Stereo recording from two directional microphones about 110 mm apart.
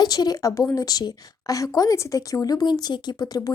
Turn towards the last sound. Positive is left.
turn(degrees=35)  # may be behind; listen again after turning